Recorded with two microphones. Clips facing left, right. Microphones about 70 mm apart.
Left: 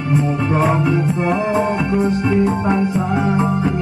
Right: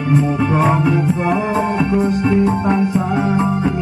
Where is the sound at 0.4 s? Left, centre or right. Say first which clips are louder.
Right 1 dB; centre.